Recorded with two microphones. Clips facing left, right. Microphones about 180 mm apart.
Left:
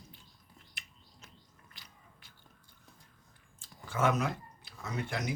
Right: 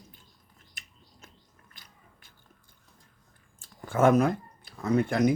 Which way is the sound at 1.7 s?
50° right (ahead or behind).